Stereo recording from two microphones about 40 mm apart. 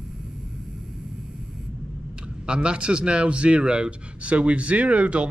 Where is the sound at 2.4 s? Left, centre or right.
Right.